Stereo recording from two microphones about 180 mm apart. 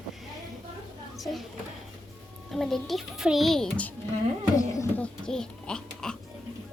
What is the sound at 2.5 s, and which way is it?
A child's voice, centre (ahead or behind).